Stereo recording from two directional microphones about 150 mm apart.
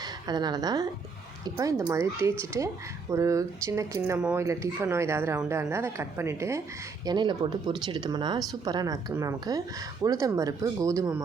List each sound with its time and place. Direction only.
0.0 s a woman's voice: 25° right (ahead or behind)